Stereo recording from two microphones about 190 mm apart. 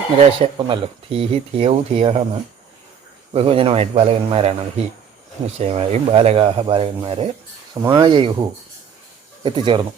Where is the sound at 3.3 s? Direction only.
30° right (ahead or behind).